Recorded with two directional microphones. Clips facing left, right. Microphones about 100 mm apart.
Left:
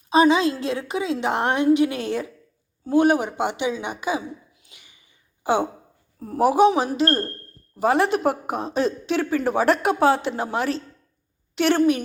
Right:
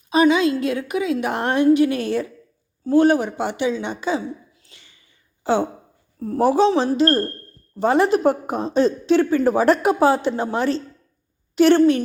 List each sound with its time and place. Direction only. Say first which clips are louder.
0.1 s a woman's voice: right 1 dB; 30° left (ahead or behind); by 12.0 s 10° left (ahead or behind)